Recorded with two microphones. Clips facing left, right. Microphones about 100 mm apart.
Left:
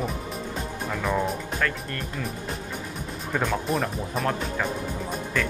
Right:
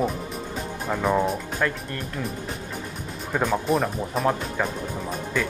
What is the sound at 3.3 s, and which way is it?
Speech, 5° right (ahead or behind).